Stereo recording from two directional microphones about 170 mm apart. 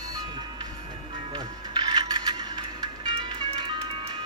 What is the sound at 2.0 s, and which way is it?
Music, 25° right (ahead or behind).